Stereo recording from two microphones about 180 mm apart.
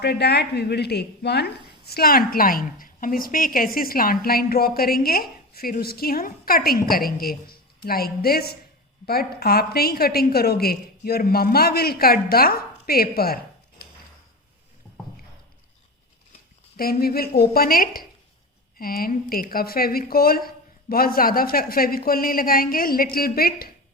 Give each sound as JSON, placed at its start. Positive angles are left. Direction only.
{"t": 0.0, "sound": "a woman's voice", "side_deg": 65}
{"t": 16.7, "sound": "a woman's voice", "side_deg": 55}